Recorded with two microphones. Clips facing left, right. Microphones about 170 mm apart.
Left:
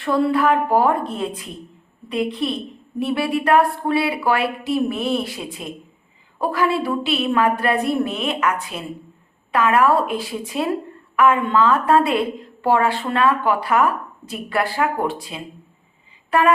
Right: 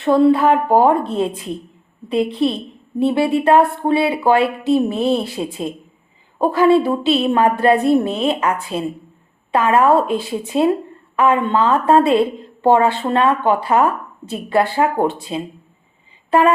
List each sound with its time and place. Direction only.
0.0 s speech: 25° right (ahead or behind)